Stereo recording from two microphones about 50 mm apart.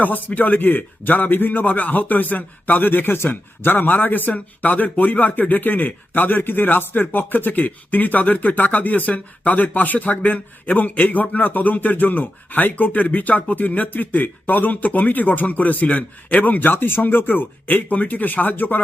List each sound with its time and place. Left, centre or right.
0.0 s speech: left